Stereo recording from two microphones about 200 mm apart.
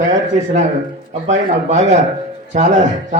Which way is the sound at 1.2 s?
35° right (ahead or behind).